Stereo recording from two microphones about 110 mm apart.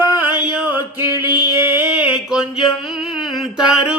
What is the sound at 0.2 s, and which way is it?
Music, 15° right (ahead or behind).